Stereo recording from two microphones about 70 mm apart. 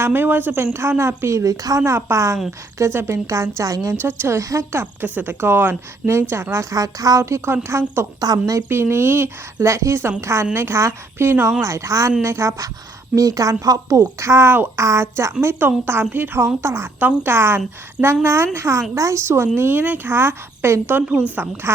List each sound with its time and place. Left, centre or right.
0.0 s a woman's voice: right
3.9 s speech: right
5.0 s a woman's voice: right
7.3 s a woman's voice: right
8.2 s speech: right
8.7 s speech: right
9.6 s a woman's voice: right
14.2 s speech: right
14.8 s a woman's voice: right
20.1 s speech: right